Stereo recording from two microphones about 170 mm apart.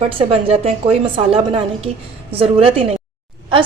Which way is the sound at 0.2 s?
35° right (ahead or behind).